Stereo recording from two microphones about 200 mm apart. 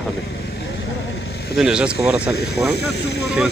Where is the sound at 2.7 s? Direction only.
55° left (ahead or behind).